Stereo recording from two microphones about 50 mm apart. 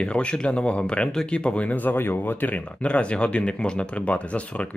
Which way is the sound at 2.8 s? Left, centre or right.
Left.